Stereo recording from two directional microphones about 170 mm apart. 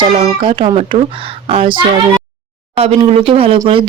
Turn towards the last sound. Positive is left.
turn(degrees=-35)  # may be behind; listen again after turning